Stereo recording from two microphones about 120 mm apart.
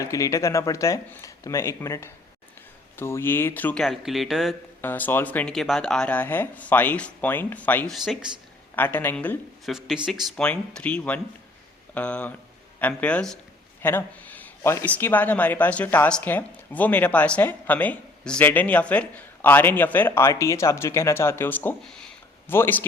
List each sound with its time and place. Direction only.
0.0 s speech: 30° left (ahead or behind)
3.8 s speech: centre (ahead or behind)
4.8 s speech: 15° left (ahead or behind)
7.9 s speech: centre (ahead or behind)
8.7 s speech: 15° left (ahead or behind)
9.6 s speech: centre (ahead or behind); by 22.9 s 20° left (ahead or behind)